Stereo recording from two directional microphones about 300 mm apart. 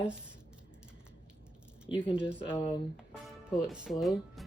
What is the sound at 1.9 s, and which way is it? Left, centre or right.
Speech, centre.